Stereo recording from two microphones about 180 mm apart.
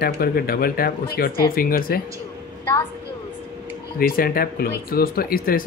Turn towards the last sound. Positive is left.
turn(degrees=55)  # may be behind; listen again after turning